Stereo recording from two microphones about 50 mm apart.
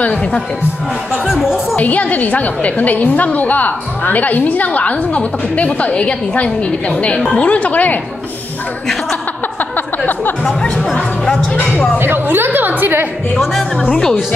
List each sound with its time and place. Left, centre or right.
0.0 s speech: left
1.1 s speech: centre
1.8 s a woman's voice: left
10.4 s speech: centre
12.0 s a woman's voice: right
13.4 s speech: centre